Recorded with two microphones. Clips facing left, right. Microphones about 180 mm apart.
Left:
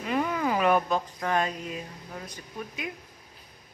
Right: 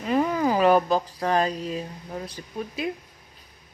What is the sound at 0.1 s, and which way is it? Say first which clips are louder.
Speech: right 5 dB; 35° right (ahead or behind).